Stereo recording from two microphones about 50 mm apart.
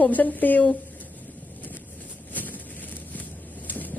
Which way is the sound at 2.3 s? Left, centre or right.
Left.